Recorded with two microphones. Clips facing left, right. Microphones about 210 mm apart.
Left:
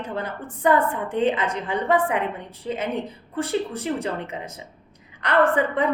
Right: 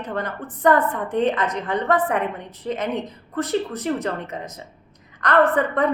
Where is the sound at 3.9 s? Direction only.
10° left (ahead or behind).